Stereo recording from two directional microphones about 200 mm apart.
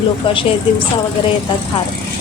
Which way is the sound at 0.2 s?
25° left (ahead or behind).